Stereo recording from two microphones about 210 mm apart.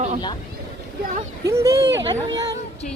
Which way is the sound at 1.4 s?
15° right (ahead or behind).